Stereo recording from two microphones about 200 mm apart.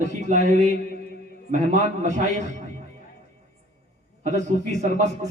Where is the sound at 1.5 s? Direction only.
35° right (ahead or behind).